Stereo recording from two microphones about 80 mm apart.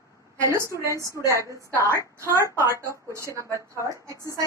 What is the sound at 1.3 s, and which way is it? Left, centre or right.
A woman's voice, right.